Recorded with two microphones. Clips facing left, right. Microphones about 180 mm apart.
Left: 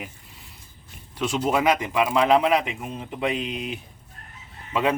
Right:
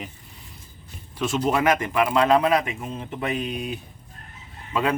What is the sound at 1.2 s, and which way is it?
Speech, 15° left (ahead or behind).